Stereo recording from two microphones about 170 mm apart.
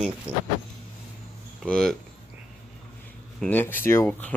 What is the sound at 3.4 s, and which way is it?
Speech, 10° left (ahead or behind).